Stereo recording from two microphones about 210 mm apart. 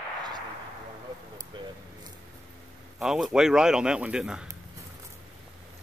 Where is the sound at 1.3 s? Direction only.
20° right (ahead or behind).